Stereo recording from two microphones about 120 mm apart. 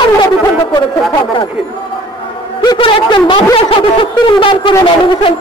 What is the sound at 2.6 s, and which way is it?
A man's voice, 40° left (ahead or behind).